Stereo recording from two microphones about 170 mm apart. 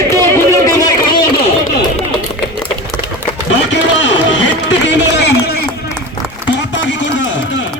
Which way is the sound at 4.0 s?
90° left.